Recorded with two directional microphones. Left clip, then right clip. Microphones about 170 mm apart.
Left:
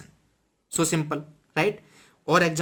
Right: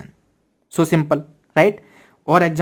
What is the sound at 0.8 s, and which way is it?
Speech, 35° right (ahead or behind).